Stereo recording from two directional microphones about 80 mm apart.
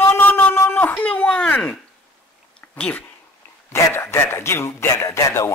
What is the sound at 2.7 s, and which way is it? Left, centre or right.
Speech, centre.